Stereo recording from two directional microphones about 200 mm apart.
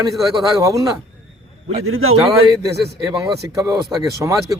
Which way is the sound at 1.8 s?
90° right.